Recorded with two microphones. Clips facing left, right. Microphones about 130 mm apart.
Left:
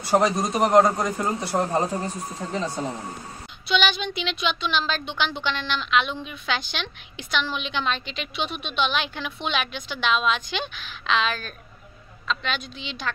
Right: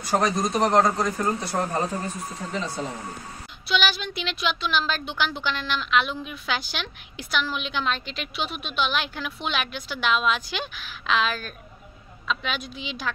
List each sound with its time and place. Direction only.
0.1 s a man's voice: 10° left (ahead or behind)
1.5 s a man's voice: 20° left (ahead or behind)
1.9 s speech: 35° left (ahead or behind)
3.6 s a woman's voice: 5° right (ahead or behind)